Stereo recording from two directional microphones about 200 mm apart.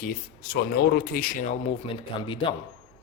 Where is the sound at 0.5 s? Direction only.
50° left (ahead or behind).